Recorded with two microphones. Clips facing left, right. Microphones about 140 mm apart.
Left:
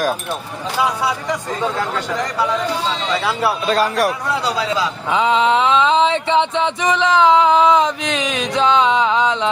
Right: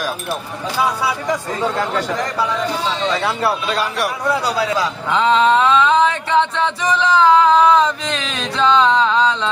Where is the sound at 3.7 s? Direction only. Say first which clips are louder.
Left 4 dB; 40° left (ahead or behind).